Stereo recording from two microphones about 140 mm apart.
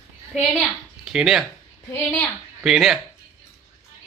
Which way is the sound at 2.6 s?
Centre (ahead or behind).